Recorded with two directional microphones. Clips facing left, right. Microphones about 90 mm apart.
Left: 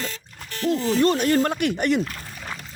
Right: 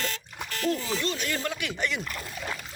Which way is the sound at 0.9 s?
50° left (ahead or behind).